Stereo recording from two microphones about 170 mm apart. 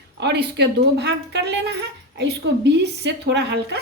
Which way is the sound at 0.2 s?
85° right.